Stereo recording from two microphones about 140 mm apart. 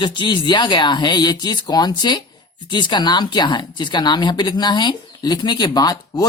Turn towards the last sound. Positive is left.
turn(degrees=30)  # may be behind; listen again after turning